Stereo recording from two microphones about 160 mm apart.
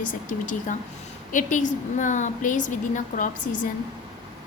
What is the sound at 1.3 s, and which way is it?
A woman's voice, 50° left (ahead or behind).